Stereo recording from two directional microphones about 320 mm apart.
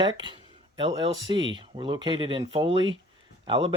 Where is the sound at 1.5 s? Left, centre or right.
Centre.